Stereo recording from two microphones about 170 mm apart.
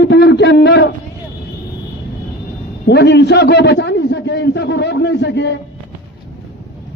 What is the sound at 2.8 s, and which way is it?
A man's voice, 80° left.